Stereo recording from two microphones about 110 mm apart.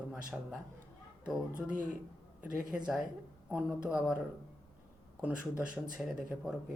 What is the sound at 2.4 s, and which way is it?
Speech, 10° right (ahead or behind).